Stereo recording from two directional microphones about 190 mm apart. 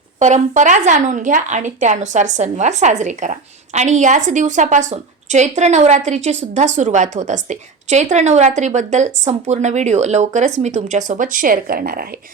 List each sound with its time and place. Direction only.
0.2 s speech: 40° right (ahead or behind)